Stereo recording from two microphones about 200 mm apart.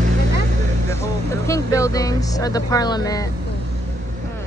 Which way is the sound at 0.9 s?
15° left (ahead or behind).